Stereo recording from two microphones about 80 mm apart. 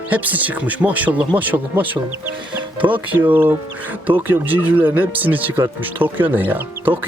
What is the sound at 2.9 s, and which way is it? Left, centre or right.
Speech, right.